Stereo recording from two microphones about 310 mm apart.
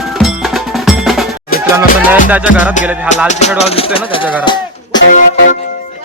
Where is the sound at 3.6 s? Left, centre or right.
Centre.